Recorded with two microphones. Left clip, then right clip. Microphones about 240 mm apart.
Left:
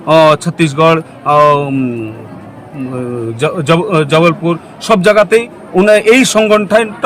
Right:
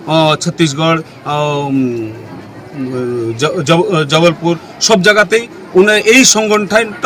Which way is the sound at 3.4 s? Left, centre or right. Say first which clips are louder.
Even; centre.